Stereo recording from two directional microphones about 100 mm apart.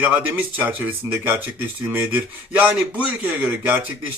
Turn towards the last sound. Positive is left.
turn(degrees=-15)  # may be behind; listen again after turning